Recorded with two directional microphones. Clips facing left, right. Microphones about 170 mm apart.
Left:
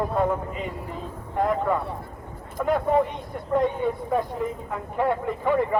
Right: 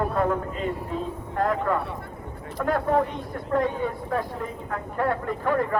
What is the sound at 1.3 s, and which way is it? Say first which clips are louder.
Speech: left 1 dB; 10° left (ahead or behind).